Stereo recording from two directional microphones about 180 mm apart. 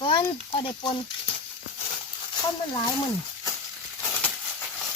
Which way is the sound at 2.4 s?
20° left (ahead or behind).